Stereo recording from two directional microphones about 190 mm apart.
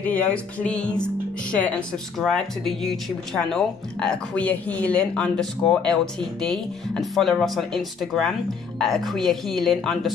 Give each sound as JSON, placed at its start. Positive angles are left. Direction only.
{"t": 0.0, "sound": "speech", "side_deg": 5}